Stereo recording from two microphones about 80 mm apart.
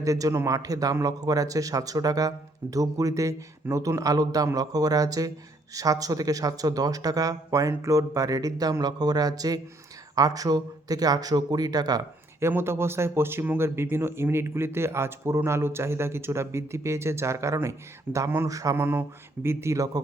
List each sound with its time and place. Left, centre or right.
0.0 s speech: right
12.4 s speech: right
18.8 s speech: right